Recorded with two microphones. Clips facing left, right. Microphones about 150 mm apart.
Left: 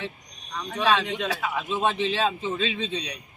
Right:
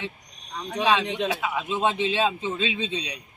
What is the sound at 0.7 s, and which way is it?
A man's voice, 15° right (ahead or behind).